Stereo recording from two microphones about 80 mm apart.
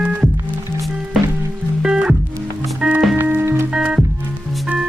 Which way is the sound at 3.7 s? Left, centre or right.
Centre.